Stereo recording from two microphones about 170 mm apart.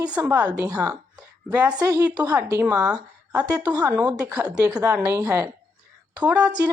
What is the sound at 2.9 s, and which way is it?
Speech, 20° right (ahead or behind).